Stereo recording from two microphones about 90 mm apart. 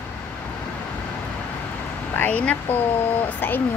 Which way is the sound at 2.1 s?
20° left (ahead or behind).